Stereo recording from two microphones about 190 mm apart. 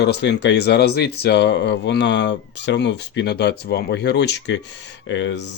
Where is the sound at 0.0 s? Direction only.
65° left (ahead or behind).